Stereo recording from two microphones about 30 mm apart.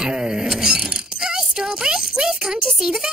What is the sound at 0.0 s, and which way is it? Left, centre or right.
Speech, right.